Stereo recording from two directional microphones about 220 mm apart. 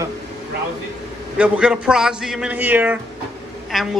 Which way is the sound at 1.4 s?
5° right (ahead or behind).